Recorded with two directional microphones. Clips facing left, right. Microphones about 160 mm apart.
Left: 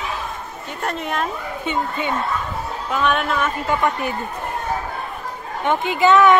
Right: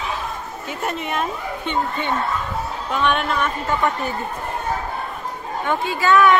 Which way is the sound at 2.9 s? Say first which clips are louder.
Left 1 dB; centre (ahead or behind).